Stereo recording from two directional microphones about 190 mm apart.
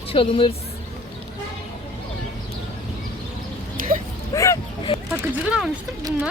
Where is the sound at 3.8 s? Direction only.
45° right (ahead or behind).